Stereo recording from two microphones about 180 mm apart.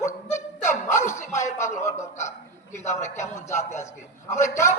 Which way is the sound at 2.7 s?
40° left (ahead or behind).